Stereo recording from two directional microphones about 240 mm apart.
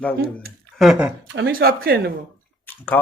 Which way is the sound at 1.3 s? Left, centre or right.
Right.